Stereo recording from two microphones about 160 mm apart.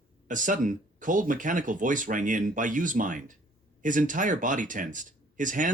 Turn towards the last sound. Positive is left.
turn(degrees=-55)  # may be behind; listen again after turning